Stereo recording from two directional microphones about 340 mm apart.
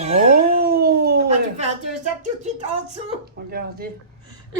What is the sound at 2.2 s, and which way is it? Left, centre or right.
Speech, centre.